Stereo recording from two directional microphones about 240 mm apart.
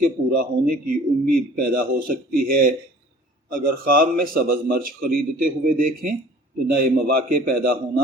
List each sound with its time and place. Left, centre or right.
0.0 s a man's voice: right